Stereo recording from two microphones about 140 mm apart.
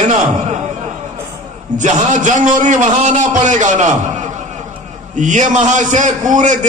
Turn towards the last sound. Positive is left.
turn(degrees=-65)  # may be behind; listen again after turning